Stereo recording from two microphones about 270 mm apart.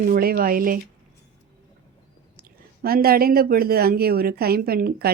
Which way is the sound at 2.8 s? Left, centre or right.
Right.